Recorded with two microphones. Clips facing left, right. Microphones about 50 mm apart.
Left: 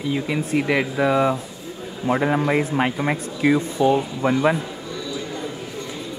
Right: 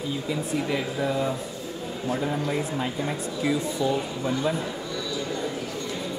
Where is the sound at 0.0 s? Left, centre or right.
Left.